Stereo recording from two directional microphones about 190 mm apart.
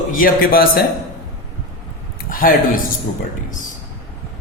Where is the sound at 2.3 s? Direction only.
50° left (ahead or behind).